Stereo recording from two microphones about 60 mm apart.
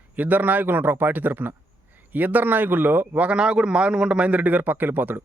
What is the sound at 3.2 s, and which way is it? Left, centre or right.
A man's voice, centre.